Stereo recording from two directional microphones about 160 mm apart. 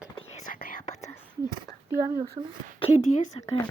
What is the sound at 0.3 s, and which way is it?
Whispering, 60° left (ahead or behind).